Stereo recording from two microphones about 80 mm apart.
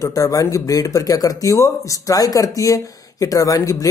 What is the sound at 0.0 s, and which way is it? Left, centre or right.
Speech, left.